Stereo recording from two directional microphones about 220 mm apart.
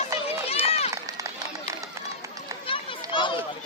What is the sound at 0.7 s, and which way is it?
Run, 25° left (ahead or behind).